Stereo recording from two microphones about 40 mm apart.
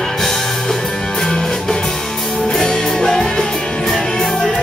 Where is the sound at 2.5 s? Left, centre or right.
Centre.